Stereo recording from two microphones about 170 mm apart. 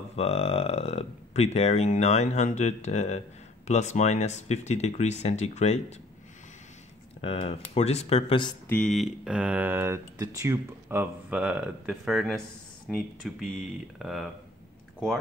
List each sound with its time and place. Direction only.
0.1 s speech: 35° left (ahead or behind)
7.2 s speech: 35° left (ahead or behind)
8.6 s speech: 5° left (ahead or behind)